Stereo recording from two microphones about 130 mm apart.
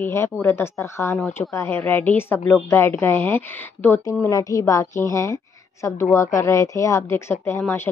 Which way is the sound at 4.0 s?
25° left (ahead or behind).